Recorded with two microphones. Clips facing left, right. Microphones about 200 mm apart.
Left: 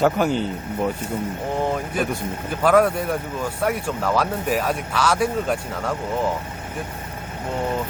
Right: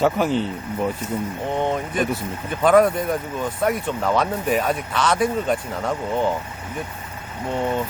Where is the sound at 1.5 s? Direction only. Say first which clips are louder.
Right 1 dB; 5° left (ahead or behind).